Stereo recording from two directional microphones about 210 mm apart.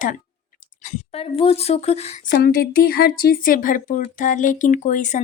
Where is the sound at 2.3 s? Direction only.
45° left (ahead or behind).